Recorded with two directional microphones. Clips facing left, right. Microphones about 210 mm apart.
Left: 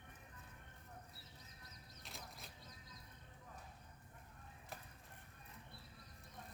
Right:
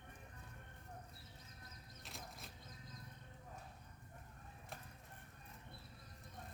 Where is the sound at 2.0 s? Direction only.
Centre (ahead or behind).